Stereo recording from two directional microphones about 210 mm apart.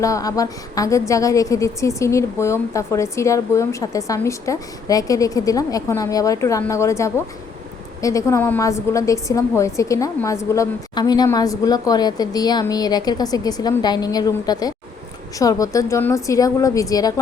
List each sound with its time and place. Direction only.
0.0 s a woman's voice: 15° left (ahead or behind)